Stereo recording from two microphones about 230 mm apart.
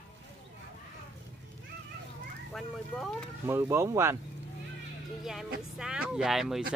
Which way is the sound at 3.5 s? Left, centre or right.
Centre.